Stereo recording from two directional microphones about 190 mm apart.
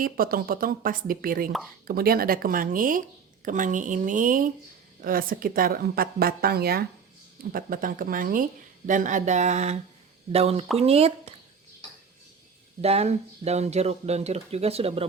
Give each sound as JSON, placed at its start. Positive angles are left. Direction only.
{"t": 0.0, "sound": "speech", "side_deg": -50}
{"t": 12.8, "sound": "speech", "side_deg": -35}